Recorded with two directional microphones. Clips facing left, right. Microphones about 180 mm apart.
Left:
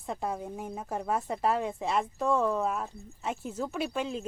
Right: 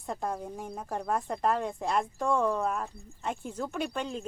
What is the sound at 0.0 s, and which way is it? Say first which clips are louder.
Speech: even; centre (ahead or behind).